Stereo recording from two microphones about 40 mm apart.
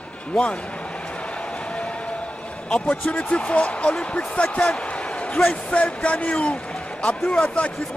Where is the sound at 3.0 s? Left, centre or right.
Left.